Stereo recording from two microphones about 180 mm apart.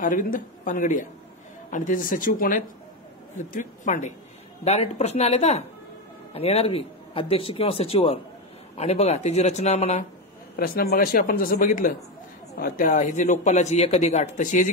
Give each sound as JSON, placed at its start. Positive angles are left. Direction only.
{"t": 0.0, "sound": "speech", "side_deg": 50}
{"t": 10.5, "sound": "speech", "side_deg": 55}